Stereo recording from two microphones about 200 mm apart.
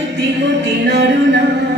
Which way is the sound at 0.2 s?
60° right (ahead or behind).